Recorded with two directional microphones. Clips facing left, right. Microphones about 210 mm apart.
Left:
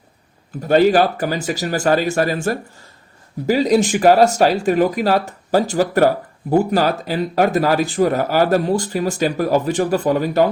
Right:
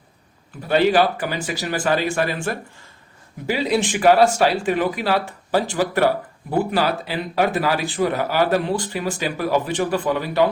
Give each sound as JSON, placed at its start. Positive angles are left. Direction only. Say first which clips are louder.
{"t": 0.7, "sound": "speech", "louder": "left 4 dB", "side_deg": 45}